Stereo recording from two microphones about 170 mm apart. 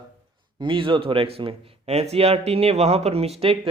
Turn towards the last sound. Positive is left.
turn(degrees=-35)  # may be behind; listen again after turning